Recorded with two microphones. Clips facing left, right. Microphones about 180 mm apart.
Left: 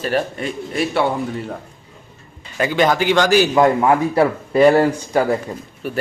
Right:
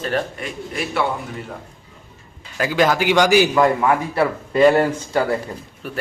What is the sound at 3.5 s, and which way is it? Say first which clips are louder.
Speech: left 2 dB; 20° left (ahead or behind).